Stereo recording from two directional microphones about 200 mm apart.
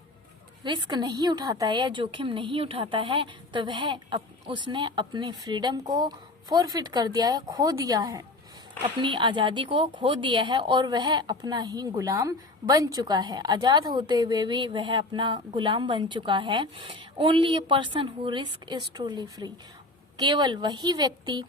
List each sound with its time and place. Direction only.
0.6 s a woman's voice: 20° right (ahead or behind)